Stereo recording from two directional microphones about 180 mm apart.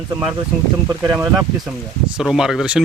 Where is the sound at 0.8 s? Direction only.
20° right (ahead or behind).